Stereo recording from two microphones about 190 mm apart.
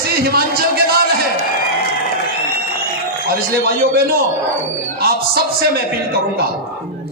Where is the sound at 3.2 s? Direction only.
55° right (ahead or behind).